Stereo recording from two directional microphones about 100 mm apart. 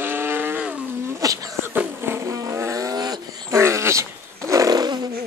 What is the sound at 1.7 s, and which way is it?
Vehicle, 20° right (ahead or behind).